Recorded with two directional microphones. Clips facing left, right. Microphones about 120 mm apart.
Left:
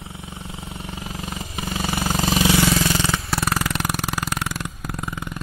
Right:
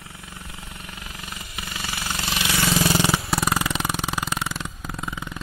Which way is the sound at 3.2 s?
5° right (ahead or behind).